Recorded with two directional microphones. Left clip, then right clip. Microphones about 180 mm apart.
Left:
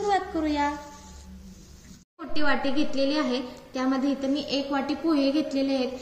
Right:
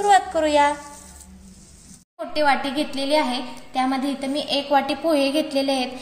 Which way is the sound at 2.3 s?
50° right (ahead or behind).